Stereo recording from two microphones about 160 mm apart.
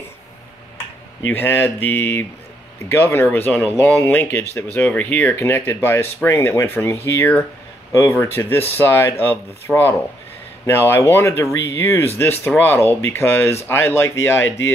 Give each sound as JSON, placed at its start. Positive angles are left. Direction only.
{"t": 1.3, "sound": "speech", "side_deg": 15}